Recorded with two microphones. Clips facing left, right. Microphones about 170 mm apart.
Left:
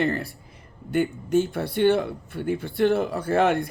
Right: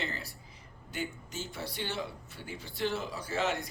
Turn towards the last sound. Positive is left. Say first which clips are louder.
# left 12 dB
turn(degrees=55)  # may be behind; listen again after turning